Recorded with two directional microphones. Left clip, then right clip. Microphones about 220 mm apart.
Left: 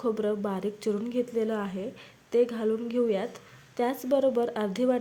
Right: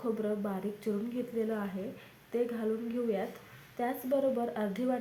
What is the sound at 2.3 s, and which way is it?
Speech, 45° left (ahead or behind).